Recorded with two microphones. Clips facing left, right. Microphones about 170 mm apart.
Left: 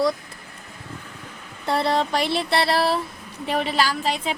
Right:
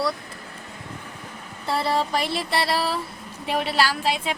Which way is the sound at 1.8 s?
5° right (ahead or behind).